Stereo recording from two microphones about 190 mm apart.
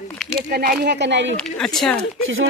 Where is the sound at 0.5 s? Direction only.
50° right (ahead or behind); by 1.3 s 70° right (ahead or behind).